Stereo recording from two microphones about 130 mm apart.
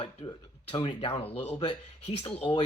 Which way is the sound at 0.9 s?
50° left (ahead or behind).